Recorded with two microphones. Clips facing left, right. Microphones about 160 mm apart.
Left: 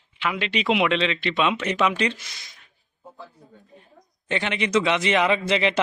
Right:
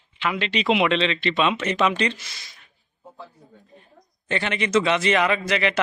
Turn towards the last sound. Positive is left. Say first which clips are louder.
# left 1 dB
turn(degrees=25)  # may be behind; listen again after turning